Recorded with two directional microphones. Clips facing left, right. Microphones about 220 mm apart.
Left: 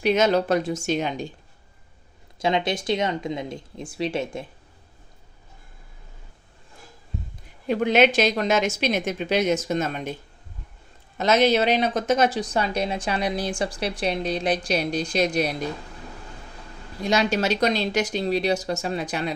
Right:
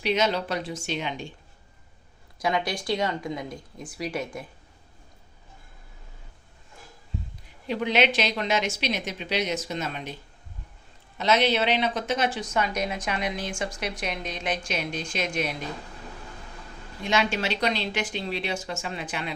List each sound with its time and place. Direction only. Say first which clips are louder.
0.0 s a woman's voice: left 5 dB; 50° left (ahead or behind)
2.4 s speech: left 4 dB; 25° left (ahead or behind)
7.7 s a woman's voice: left 5 dB; 50° left (ahead or behind)
11.2 s speech: left 4 dB; 45° left (ahead or behind)
17.0 s speech: left 4 dB; 40° left (ahead or behind)